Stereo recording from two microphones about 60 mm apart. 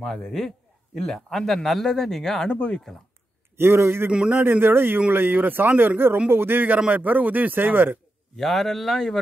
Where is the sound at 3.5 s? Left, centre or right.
Right.